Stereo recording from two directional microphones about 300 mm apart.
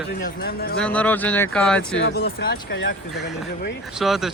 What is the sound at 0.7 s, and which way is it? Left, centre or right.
Speech, centre.